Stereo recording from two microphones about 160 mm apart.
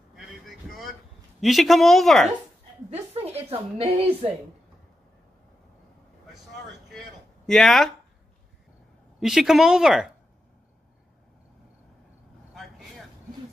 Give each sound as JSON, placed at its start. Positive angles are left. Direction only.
{"t": 0.1, "sound": "vehicle", "side_deg": 0}
{"t": 1.4, "sound": "speech", "side_deg": 0}
{"t": 2.9, "sound": "a woman's voice", "side_deg": -40}
{"t": 7.4, "sound": "speech", "side_deg": 0}
{"t": 9.2, "sound": "speech", "side_deg": 0}